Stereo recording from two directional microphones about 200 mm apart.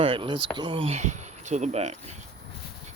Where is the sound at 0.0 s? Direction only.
25° right (ahead or behind).